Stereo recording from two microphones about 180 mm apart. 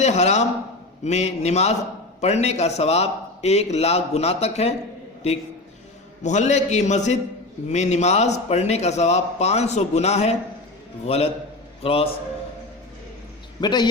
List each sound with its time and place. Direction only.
0.0 s a man's voice: 40° left (ahead or behind)
6.2 s a man's voice: 40° left (ahead or behind)
13.6 s a man's voice: 25° left (ahead or behind)